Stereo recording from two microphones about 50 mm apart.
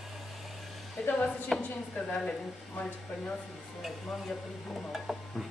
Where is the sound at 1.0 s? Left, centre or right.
Left.